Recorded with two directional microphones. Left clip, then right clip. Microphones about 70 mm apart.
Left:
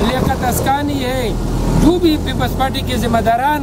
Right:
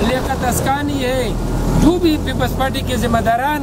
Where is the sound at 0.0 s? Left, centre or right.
Centre.